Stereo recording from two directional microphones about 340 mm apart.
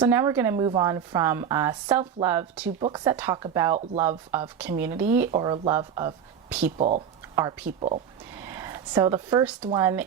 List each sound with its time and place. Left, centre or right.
0.0 s a woman's voice: centre
8.4 s a woman's voice: centre